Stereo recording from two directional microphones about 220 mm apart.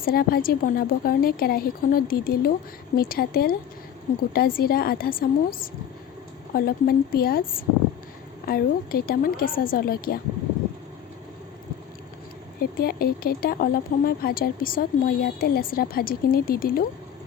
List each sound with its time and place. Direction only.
0.0 s a woman's voice: 40° left (ahead or behind)
12.8 s speech: 40° left (ahead or behind)